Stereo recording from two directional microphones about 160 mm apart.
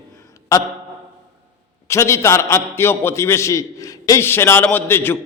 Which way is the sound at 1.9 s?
15° left (ahead or behind).